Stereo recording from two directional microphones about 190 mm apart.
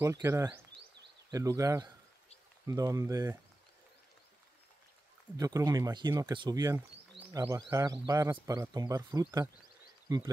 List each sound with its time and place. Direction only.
0.0 s speech: 15° right (ahead or behind)
5.4 s speech: 20° right (ahead or behind)